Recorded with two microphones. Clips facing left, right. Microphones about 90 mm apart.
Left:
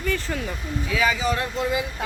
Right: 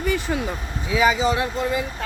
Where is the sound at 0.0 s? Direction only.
15° right (ahead or behind).